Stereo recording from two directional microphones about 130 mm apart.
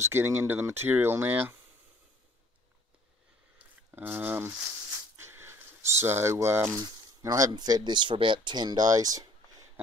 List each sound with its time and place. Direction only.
0.0 s speech: 20° right (ahead or behind)
3.5 s speech: 15° right (ahead or behind)